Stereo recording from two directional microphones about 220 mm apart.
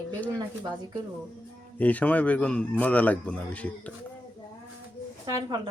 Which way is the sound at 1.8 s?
5° left (ahead or behind).